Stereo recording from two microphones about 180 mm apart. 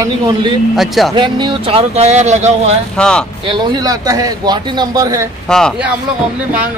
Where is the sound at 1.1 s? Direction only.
25° right (ahead or behind).